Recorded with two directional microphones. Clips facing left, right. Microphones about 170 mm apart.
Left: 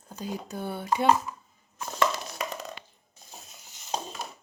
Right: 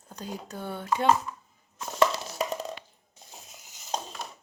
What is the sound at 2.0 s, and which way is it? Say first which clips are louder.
Wood block: right 3 dB; 30° right (ahead or behind).